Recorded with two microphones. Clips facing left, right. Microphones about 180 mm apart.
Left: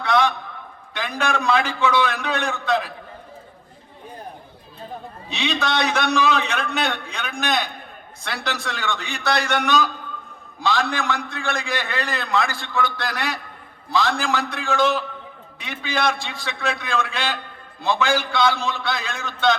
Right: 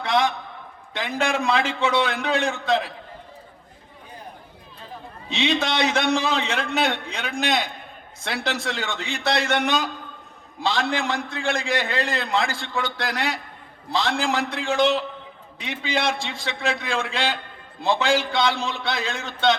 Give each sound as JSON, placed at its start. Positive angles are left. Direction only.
{"t": 0.9, "sound": "a man's voice", "side_deg": -25}
{"t": 5.3, "sound": "a man's voice", "side_deg": -25}